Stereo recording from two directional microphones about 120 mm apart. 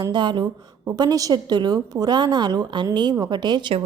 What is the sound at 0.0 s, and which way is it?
A woman's voice, 35° right (ahead or behind).